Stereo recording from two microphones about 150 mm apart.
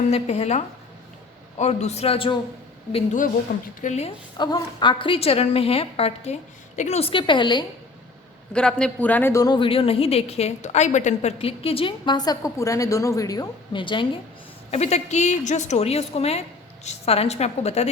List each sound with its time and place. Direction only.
0.1 s a woman's voice: 45° left (ahead or behind)
3.8 s a woman's voice: 50° left (ahead or behind)
4.4 s a woman's voice: 30° left (ahead or behind)
8.5 s a woman's voice: 5° left (ahead or behind); by 14.1 s 35° left (ahead or behind)
14.7 s a woman's voice: 45° left (ahead or behind)